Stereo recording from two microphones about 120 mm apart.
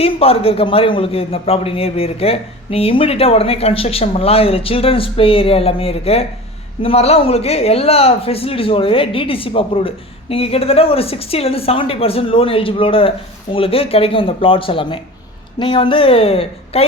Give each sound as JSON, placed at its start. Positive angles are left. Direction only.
{"t": 0.0, "sound": "a man's voice", "side_deg": 55}